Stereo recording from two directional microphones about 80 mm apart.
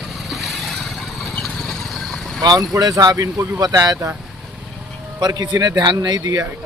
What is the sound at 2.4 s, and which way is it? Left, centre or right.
Speech, right.